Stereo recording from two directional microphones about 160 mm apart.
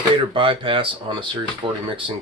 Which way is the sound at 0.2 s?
35° right (ahead or behind).